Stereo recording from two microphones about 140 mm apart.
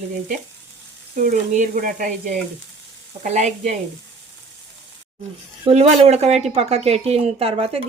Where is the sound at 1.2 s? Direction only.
65° right (ahead or behind).